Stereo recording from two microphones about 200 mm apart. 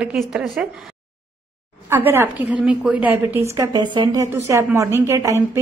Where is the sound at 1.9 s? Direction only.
10° right (ahead or behind).